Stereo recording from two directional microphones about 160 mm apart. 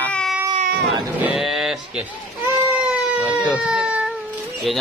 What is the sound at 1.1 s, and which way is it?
Speech, 5° right (ahead or behind).